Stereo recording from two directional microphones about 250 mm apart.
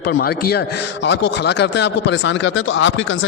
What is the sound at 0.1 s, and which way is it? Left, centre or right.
A man's voice, left.